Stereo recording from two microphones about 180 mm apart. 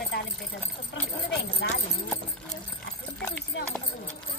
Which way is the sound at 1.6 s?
75° left (ahead or behind).